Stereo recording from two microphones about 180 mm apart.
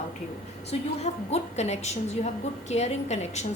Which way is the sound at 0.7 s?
35° left (ahead or behind).